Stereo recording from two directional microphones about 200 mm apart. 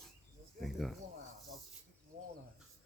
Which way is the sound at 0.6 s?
Centre (ahead or behind).